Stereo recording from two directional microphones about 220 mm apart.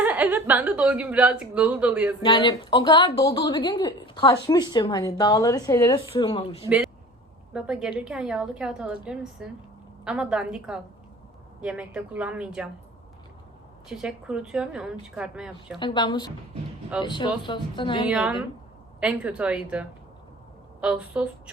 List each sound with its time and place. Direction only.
0.0 s a woman's voice: 5° right (ahead or behind)
2.2 s a woman's voice: 20° left (ahead or behind)
6.7 s a woman's voice: 5° right (ahead or behind)
13.8 s a woman's voice: 5° right (ahead or behind)
15.8 s a woman's voice: 20° left (ahead or behind)
18.1 s a woman's voice: 5° right (ahead or behind)